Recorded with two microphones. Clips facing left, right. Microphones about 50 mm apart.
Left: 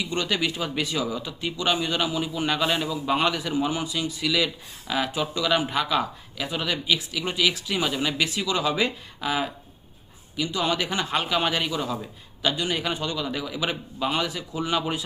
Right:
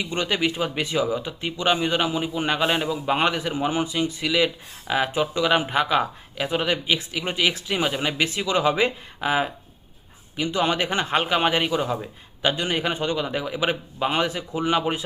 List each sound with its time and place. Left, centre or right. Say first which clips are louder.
0.0 s speech: right 2 dB; right